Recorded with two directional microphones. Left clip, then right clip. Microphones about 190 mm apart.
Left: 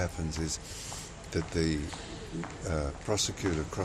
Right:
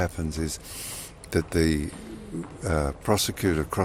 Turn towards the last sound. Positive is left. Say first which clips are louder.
# right 7 dB
turn(degrees=-50)  # may be behind; listen again after turning